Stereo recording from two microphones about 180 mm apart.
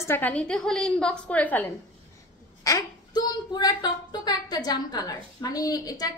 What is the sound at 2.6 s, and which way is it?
Speech, 20° left (ahead or behind).